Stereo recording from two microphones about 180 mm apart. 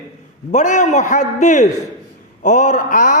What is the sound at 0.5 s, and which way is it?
A man's voice, 40° left (ahead or behind).